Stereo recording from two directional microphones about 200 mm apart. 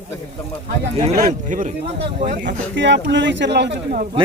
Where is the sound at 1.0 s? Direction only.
40° right (ahead or behind).